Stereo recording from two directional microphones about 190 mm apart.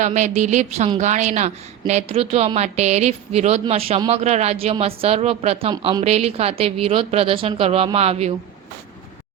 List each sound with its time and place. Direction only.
0.0 s a woman's voice: 40° right (ahead or behind)